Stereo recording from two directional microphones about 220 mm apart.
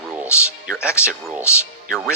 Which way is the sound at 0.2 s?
5° right (ahead or behind).